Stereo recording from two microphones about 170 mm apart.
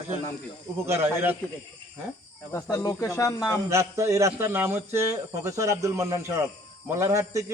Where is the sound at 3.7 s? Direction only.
15° right (ahead or behind).